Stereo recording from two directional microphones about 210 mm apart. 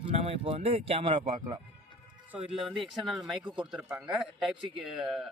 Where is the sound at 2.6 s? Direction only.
Centre (ahead or behind).